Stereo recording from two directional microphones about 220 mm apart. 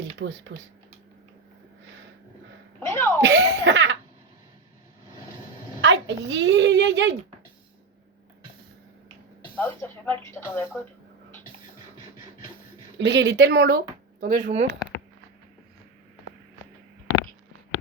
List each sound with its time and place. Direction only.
0.0 s speech: 55° right (ahead or behind)
2.8 s a sound: 10° left (ahead or behind)
3.2 s laughter: 55° right (ahead or behind)
5.8 s a woman's voice: 55° right (ahead or behind)
9.6 s speech: 10° left (ahead or behind)
13.0 s speech: 55° right (ahead or behind); by 14.8 s 35° right (ahead or behind)